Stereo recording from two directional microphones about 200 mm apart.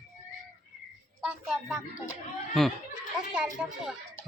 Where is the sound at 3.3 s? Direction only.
5° right (ahead or behind).